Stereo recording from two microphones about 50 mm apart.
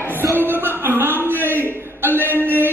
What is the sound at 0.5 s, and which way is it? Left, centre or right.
Music, right.